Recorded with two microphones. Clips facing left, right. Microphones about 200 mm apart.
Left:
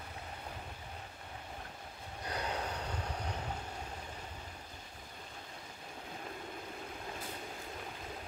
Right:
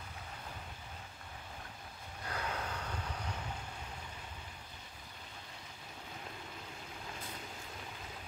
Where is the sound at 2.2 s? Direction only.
20° left (ahead or behind).